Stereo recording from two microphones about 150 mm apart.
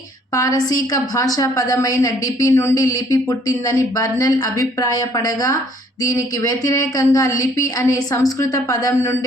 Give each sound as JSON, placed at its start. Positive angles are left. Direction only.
{"t": 0.3, "sound": "a woman's voice", "side_deg": 25}